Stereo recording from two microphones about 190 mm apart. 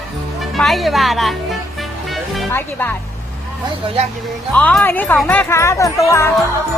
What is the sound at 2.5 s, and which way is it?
Speech, 10° left (ahead or behind).